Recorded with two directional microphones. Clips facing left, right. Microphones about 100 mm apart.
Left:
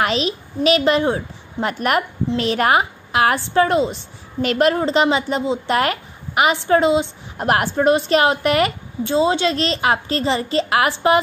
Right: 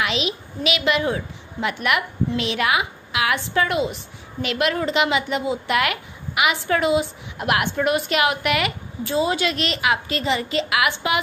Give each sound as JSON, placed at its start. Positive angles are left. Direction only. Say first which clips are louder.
{"t": 0.0, "sound": "a sound", "louder": "left 5 dB", "side_deg": 40}
{"t": 0.7, "sound": "a woman's voice", "louder": "left 5 dB", "side_deg": 35}
{"t": 7.4, "sound": "a woman's voice", "louder": "left 5 dB", "side_deg": 35}